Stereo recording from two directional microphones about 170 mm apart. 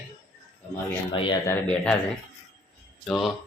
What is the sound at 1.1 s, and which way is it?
Speech, 30° left (ahead or behind).